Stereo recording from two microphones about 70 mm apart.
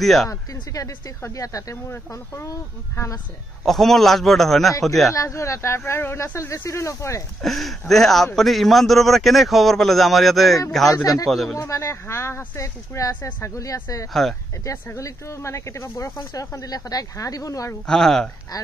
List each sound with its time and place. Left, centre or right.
0.0 s speech: centre
0.3 s speech: left
3.6 s speech: centre
5.1 s speech: left
7.4 s speech: centre
11.5 s speech: left
14.2 s speech: centre
15.0 s speech: left
17.8 s speech: centre